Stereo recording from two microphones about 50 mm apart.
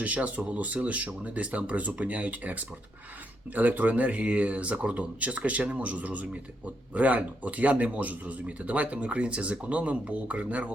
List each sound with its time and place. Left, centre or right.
0.0 s speech: right